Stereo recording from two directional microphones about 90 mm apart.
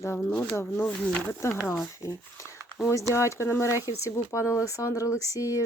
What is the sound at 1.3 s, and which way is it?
Speech, 30° left (ahead or behind).